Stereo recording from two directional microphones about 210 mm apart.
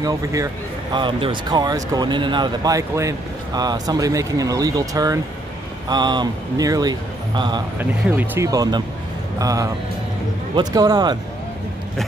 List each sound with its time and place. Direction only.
0.0 s speech: 15° right (ahead or behind)